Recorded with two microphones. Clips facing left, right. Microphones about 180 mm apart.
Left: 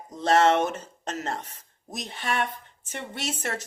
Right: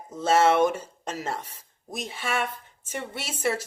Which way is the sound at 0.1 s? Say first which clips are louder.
Even; 5° right (ahead or behind).